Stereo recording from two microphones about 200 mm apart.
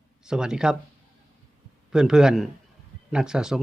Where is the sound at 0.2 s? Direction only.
5° right (ahead or behind).